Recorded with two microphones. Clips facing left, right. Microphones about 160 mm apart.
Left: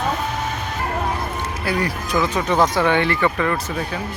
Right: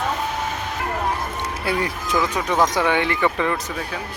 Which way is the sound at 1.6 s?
20° right (ahead or behind).